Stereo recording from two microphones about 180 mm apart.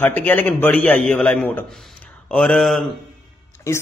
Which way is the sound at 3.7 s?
15° left (ahead or behind).